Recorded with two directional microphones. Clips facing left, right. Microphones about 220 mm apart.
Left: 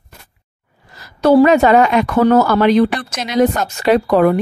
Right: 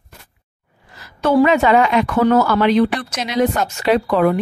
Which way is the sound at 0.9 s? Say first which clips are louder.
Left 4 dB; 35° left (ahead or behind).